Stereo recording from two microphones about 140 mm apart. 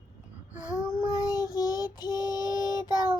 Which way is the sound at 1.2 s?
25° left (ahead or behind).